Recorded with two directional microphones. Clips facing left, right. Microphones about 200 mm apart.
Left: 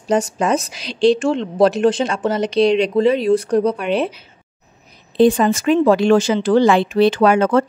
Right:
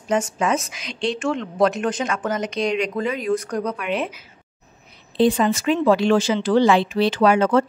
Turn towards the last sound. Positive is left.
turn(degrees=50)  # may be behind; listen again after turning